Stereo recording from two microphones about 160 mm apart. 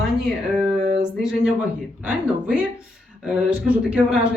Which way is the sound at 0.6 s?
Centre (ahead or behind).